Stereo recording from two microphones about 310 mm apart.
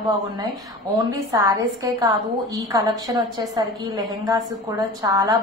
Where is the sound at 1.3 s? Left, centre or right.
Centre.